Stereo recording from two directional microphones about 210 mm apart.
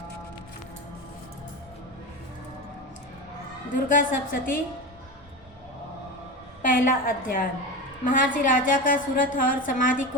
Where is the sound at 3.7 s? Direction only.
40° left (ahead or behind).